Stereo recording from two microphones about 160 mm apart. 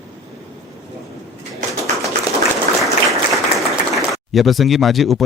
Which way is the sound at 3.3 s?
Centre (ahead or behind).